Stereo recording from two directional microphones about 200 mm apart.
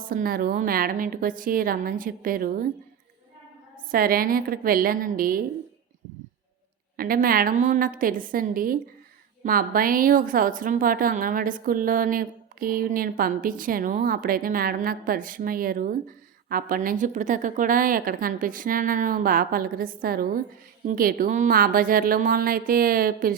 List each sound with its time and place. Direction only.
0.0 s a woman's voice: 45° right (ahead or behind)
3.9 s a woman's voice: 45° right (ahead or behind)
6.9 s a woman's voice: 45° right (ahead or behind)